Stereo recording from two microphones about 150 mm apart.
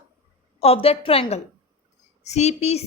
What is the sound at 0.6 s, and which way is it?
A woman's voice, 40° left (ahead or behind).